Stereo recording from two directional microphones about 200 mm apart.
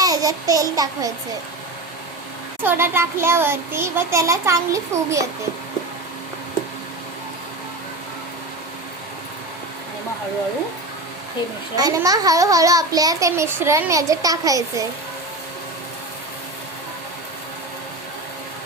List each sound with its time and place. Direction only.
0.0 s babbling: 15° right (ahead or behind)
2.6 s a child's voice: 10° right (ahead or behind)
11.8 s a child's voice: 20° right (ahead or behind)